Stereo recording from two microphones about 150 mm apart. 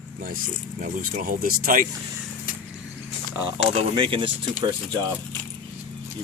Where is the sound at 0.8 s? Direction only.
70° right (ahead or behind).